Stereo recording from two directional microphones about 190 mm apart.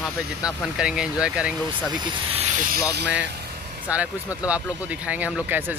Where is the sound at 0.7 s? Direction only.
5° right (ahead or behind).